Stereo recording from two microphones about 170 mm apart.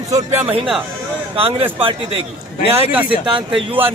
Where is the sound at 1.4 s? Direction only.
35° right (ahead or behind).